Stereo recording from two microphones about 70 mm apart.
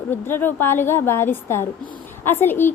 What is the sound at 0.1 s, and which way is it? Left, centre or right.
A woman's voice, left.